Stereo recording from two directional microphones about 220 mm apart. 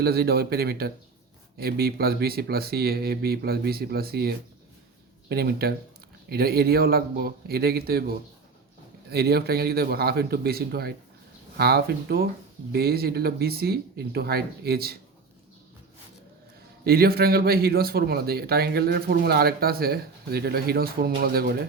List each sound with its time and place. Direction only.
0.0 s a man's voice: 45° right (ahead or behind)
16.8 s a man's voice: 45° right (ahead or behind)